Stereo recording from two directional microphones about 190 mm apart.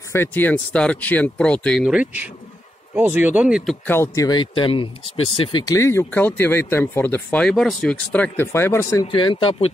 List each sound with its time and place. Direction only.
0.1 s speech: 10° left (ahead or behind); by 3.7 s 5° right (ahead or behind)
3.8 s speech: 10° left (ahead or behind)
9.0 s speech: 25° left (ahead or behind)